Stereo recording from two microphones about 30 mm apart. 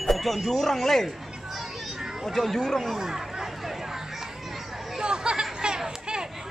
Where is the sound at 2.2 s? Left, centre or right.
Centre.